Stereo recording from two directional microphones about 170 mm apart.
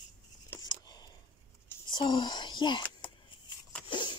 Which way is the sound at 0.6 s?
25° left (ahead or behind).